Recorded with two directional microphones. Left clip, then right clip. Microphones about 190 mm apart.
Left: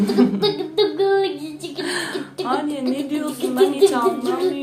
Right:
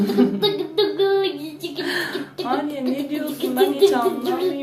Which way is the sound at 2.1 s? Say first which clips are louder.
Left 1 dB; 15° left (ahead or behind).